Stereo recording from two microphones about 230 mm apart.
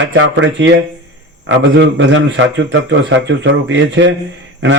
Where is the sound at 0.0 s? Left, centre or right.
Right.